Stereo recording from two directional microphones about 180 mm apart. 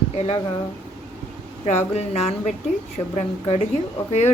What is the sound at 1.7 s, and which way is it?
A woman's voice, 35° left (ahead or behind).